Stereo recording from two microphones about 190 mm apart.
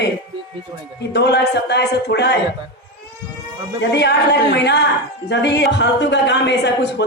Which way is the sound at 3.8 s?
60° left (ahead or behind).